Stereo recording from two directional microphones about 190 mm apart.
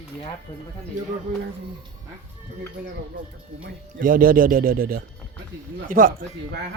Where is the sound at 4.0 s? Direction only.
45° right (ahead or behind).